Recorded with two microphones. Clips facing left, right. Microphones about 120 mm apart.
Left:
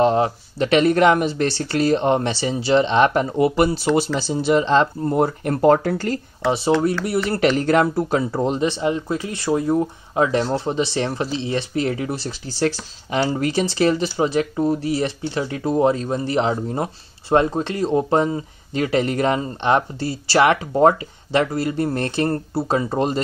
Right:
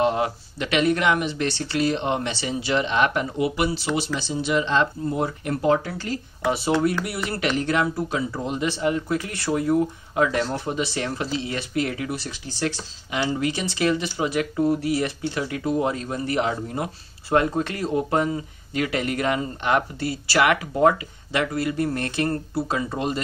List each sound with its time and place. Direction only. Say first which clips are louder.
0.0 s speech: left 5 dB; 35° left (ahead or behind)
5.0 s speech: left 6 dB; 45° left (ahead or behind)
7.1 s speech: left 7 dB; 35° left (ahead or behind)